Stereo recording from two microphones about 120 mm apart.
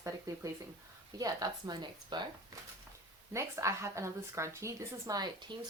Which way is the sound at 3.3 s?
25° right (ahead or behind).